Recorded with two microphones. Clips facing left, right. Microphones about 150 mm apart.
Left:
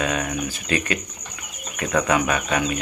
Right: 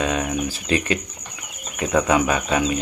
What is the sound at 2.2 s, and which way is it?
Speech, 25° right (ahead or behind).